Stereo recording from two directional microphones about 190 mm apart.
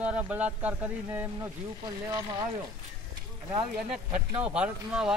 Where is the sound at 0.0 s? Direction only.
5° right (ahead or behind).